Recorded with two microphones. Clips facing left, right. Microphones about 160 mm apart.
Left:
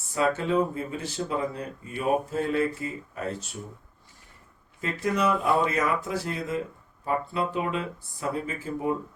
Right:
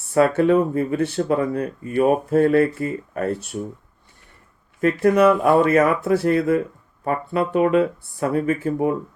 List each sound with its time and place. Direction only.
0.1 s speech: 60° right (ahead or behind)
4.8 s speech: 60° right (ahead or behind)